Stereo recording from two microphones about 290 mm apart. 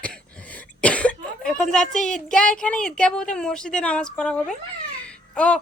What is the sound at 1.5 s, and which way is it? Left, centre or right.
A woman's voice, centre.